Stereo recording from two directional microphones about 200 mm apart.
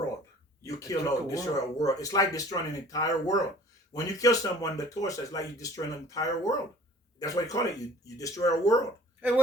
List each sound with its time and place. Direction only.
0.6 s speech: 15° left (ahead or behind)